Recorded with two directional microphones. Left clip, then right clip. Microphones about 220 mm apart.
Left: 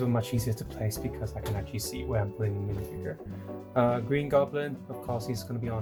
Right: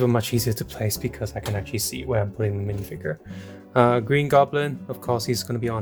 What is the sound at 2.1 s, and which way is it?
Speech, 45° right (ahead or behind).